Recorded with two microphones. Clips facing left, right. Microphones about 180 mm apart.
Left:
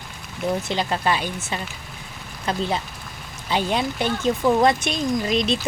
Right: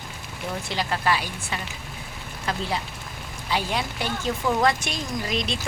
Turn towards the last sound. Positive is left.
turn(degrees=20)  # may be behind; listen again after turning